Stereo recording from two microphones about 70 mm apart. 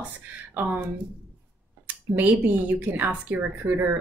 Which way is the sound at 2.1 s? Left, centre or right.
Right.